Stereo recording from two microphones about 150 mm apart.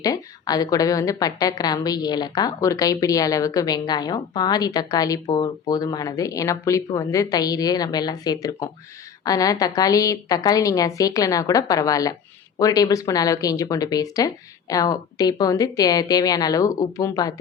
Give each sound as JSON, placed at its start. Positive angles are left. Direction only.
{"t": 0.0, "sound": "a woman's voice", "side_deg": 25}